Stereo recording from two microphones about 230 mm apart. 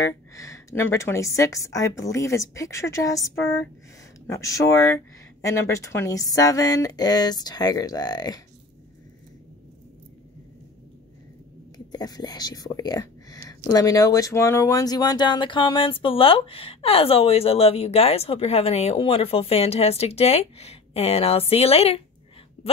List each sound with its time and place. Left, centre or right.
0.0 s speech: centre
4.3 s speech: centre
11.9 s speech: centre